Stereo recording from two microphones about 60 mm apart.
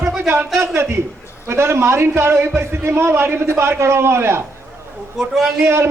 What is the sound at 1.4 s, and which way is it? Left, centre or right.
A man's voice, right.